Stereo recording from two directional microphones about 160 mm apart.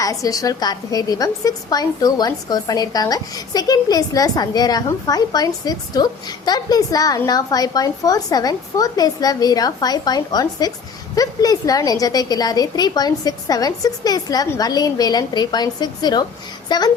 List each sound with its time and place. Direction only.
0.0 s a woman's voice: 20° left (ahead or behind)